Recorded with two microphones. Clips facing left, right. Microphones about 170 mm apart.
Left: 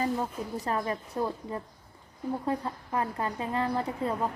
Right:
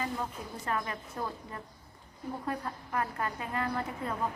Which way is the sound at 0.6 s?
35° left (ahead or behind).